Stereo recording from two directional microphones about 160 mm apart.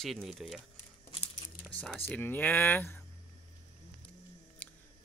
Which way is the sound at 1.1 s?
35° left (ahead or behind).